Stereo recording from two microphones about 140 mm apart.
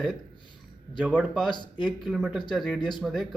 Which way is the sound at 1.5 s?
35° left (ahead or behind).